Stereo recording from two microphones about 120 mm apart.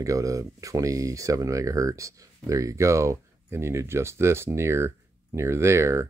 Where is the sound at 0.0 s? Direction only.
25° right (ahead or behind).